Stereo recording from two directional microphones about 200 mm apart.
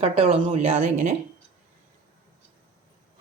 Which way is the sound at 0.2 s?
30° right (ahead or behind).